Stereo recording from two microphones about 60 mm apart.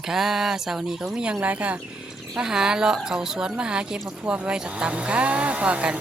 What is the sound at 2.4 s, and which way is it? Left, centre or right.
A woman's voice, centre.